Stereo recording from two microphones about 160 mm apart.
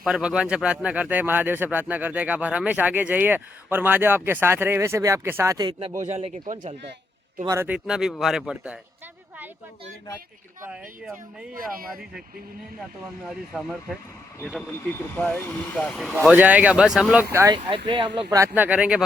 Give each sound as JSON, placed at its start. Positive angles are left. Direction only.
{"t": 0.0, "sound": "speech", "side_deg": -5}
{"t": 6.0, "sound": "speech", "side_deg": -45}
{"t": 7.4, "sound": "speech", "side_deg": -15}
{"t": 7.9, "sound": "speech", "side_deg": -5}
{"t": 10.7, "sound": "speech", "side_deg": -5}
{"t": 13.2, "sound": "speech", "side_deg": 0}
{"t": 15.1, "sound": "speech", "side_deg": 10}
{"t": 16.2, "sound": "speech", "side_deg": -10}
{"t": 17.3, "sound": "speech", "side_deg": -20}
{"t": 17.8, "sound": "speech", "side_deg": -35}
{"t": 18.3, "sound": "speech", "side_deg": -15}